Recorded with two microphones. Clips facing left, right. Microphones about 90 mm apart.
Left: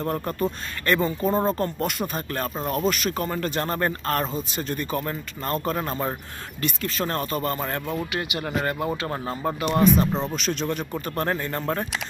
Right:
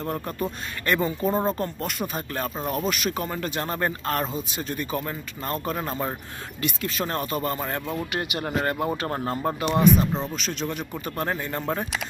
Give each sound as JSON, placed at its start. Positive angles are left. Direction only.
{"t": 0.0, "sound": "speech", "side_deg": -5}
{"t": 8.1, "sound": "speech", "side_deg": -40}
{"t": 9.4, "sound": "speech", "side_deg": -30}
{"t": 9.8, "sound": "speech", "side_deg": -5}